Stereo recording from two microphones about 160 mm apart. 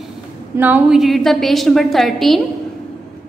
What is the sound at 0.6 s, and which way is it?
A woman's voice, 10° right (ahead or behind).